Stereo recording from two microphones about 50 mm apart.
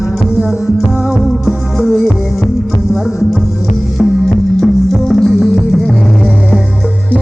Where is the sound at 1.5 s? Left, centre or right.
Centre.